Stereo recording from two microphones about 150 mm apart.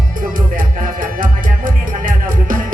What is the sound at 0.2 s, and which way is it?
Music, 65° right (ahead or behind).